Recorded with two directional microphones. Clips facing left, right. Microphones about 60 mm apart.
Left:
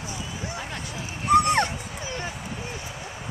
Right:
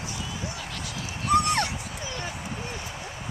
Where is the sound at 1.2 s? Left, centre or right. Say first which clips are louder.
Left 4 dB; left.